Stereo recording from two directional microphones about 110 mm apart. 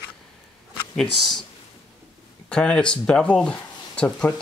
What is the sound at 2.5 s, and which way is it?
Speech, 10° left (ahead or behind).